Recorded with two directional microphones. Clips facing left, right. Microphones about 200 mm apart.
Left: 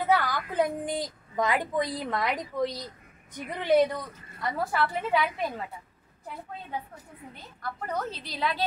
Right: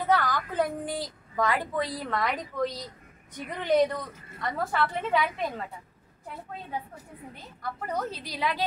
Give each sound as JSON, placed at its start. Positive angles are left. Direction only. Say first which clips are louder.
{"t": 0.0, "sound": "a woman's voice", "louder": "even", "side_deg": 10}
{"t": 7.8, "sound": "a woman's voice", "louder": "right 1 dB", "side_deg": -15}